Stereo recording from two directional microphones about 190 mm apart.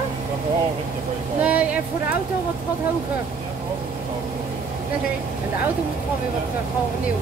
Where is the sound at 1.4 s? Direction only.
5° right (ahead or behind).